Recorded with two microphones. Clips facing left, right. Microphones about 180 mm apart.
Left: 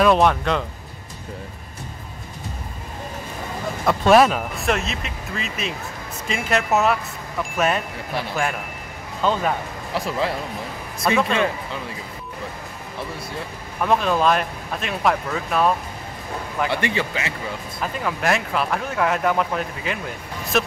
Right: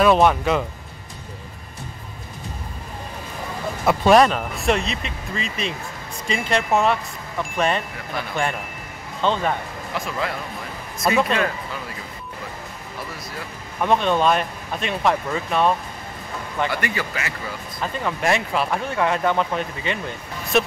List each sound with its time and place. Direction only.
0.0 s speech: centre (ahead or behind)
3.8 s speech: centre (ahead or behind)
9.2 s speech: 5° left (ahead or behind)
9.9 s speech: 30° left (ahead or behind)
11.1 s speech: centre (ahead or behind)
13.7 s speech: centre (ahead or behind)
16.7 s a man's voice: 25° left (ahead or behind)
17.7 s speech: centre (ahead or behind)